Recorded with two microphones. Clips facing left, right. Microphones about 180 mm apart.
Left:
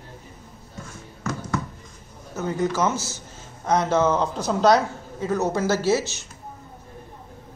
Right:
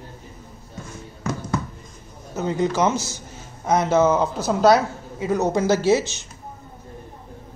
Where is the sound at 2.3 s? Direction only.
20° right (ahead or behind).